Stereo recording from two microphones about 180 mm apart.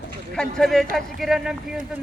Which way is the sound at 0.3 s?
5° left (ahead or behind).